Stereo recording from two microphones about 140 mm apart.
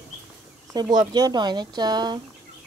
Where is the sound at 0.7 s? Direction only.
30° right (ahead or behind).